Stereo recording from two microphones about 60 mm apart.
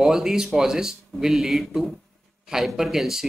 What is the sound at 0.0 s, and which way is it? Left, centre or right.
Speech, centre.